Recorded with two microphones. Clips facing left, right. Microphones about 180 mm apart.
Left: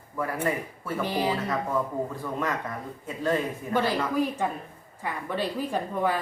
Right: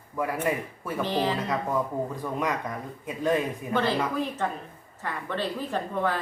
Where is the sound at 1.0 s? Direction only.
10° left (ahead or behind).